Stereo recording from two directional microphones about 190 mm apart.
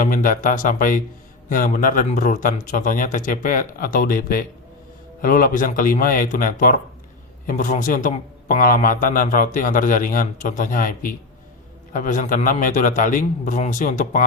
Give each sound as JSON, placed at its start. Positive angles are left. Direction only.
{"t": 0.0, "sound": "a man's voice", "side_deg": 45}